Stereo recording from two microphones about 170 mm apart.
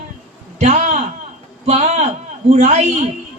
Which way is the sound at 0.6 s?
40° right (ahead or behind).